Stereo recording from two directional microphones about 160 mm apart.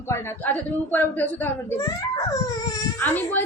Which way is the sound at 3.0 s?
10° left (ahead or behind).